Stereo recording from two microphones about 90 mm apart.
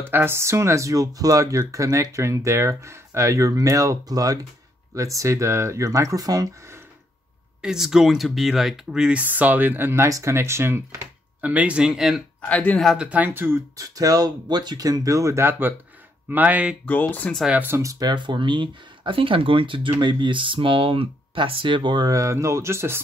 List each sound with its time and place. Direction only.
0.0 s speech: 25° right (ahead or behind); by 6.5 s 45° right (ahead or behind)
7.6 s speech: 5° right (ahead or behind)
9.2 s speech: 20° right (ahead or behind)
10.0 s speech: 35° right (ahead or behind)
11.4 s speech: 15° right (ahead or behind)
12.4 s speech: 15° left (ahead or behind)
12.8 s speech: 10° right (ahead or behind)
13.7 s speech: 40° right (ahead or behind)
16.3 s speech: 20° right (ahead or behind)
16.8 s speech: 20° left (ahead or behind)
17.5 s speech: 20° right (ahead or behind)
17.7 s speech: 35° right (ahead or behind)
18.0 s speech: 60° right (ahead or behind); by 22.9 s 30° right (ahead or behind)